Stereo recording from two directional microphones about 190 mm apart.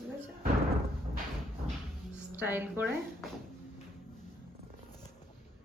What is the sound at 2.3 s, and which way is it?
Speech, 10° right (ahead or behind).